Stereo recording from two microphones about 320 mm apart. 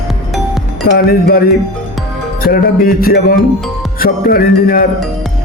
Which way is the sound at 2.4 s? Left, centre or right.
Left.